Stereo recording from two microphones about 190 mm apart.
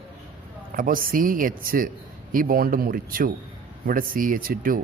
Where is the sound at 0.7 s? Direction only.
50° right (ahead or behind).